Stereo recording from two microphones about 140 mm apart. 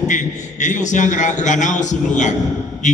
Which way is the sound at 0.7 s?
60° left (ahead or behind).